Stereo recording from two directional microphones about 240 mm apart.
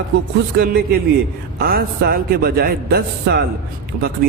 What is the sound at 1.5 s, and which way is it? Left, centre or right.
A man's voice, right.